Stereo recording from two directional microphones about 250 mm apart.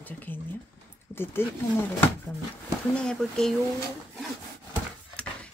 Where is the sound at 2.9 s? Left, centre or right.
Centre.